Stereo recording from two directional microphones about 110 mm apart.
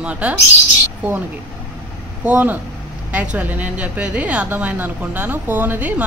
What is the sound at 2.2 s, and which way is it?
A woman's voice, 15° right (ahead or behind).